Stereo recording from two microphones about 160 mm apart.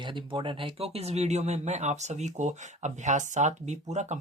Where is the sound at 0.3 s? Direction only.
35° right (ahead or behind).